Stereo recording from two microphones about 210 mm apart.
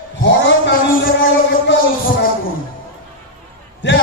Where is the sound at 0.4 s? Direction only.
55° left (ahead or behind).